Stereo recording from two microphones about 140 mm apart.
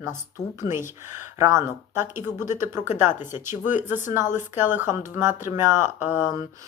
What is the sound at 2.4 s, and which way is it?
Speech, 60° left (ahead or behind).